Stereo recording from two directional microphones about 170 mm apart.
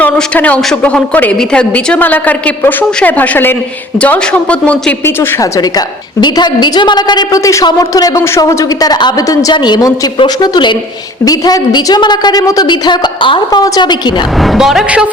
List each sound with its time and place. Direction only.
0.0 s a woman's voice: 10° left (ahead or behind); by 14.1 s 25° left (ahead or behind)
14.4 s a woman's voice: centre (ahead or behind)